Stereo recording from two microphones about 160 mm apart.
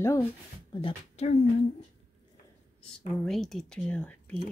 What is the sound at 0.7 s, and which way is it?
Speech, 35° left (ahead or behind).